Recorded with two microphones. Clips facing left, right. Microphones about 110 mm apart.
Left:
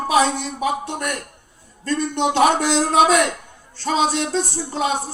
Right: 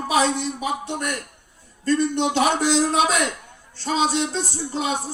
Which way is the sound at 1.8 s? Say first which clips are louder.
Even; 55° left (ahead or behind).